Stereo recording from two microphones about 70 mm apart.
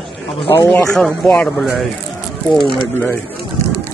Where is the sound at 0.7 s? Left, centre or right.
Centre.